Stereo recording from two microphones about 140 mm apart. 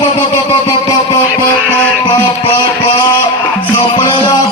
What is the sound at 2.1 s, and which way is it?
Music, 30° left (ahead or behind).